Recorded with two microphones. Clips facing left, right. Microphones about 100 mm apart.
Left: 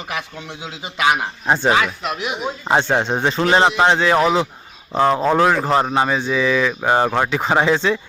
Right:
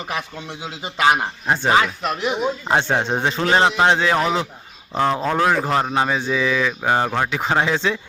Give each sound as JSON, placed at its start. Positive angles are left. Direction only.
{"t": 0.1, "sound": "a man's voice", "side_deg": -25}
{"t": 2.0, "sound": "speech", "side_deg": 5}
{"t": 3.0, "sound": "speech", "side_deg": -5}